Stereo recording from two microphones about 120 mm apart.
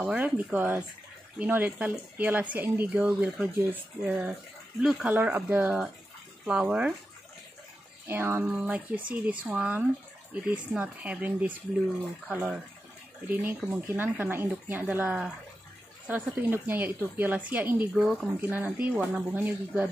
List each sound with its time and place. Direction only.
0.0 s speech: 15° right (ahead or behind)
8.1 s speech: 20° right (ahead or behind)
17.9 s speech: 5° right (ahead or behind)
18.4 s speech: 15° right (ahead or behind)